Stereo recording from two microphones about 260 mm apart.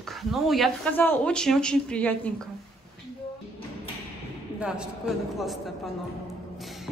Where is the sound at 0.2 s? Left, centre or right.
Centre.